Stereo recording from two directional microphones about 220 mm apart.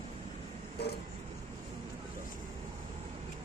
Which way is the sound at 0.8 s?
50° left (ahead or behind).